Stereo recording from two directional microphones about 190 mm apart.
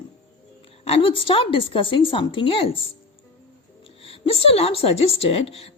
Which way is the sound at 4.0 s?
30° left (ahead or behind).